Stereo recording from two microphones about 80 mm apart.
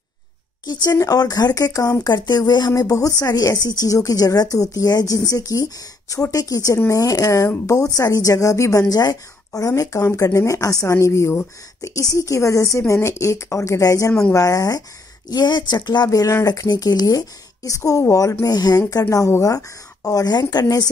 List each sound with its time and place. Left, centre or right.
0.9 s a woman's voice: left
2.0 s a woman's voice: left
15.2 s speech: left
16.1 s a woman's voice: left
16.6 s a woman's voice: left
18.4 s speech: left
18.9 s a woman's voice: left